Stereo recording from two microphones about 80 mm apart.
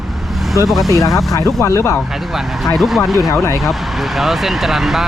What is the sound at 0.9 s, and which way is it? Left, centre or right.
Speech, left.